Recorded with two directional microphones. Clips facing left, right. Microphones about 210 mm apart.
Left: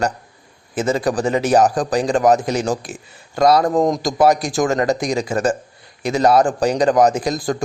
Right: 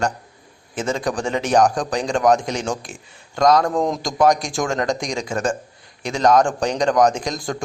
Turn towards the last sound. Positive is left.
turn(degrees=5)  # may be behind; listen again after turning